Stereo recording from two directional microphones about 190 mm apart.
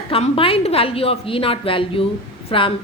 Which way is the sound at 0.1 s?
30° left (ahead or behind).